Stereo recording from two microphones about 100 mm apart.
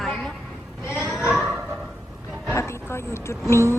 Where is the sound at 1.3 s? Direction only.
10° right (ahead or behind).